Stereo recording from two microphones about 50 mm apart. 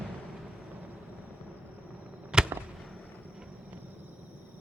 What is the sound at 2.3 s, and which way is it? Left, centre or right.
Whip, centre.